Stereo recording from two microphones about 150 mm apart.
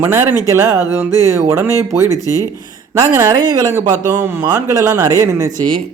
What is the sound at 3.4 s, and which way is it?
Speech, 25° right (ahead or behind).